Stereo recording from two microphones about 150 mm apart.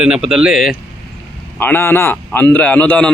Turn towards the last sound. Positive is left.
turn(degrees=10)  # may be behind; listen again after turning